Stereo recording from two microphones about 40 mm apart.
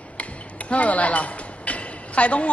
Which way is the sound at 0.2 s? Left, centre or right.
Left.